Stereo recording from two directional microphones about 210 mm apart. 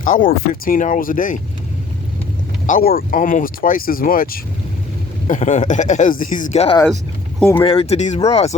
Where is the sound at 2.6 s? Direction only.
40° left (ahead or behind).